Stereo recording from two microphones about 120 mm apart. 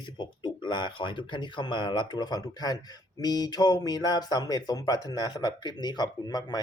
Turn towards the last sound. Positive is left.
turn(degrees=35)  # may be behind; listen again after turning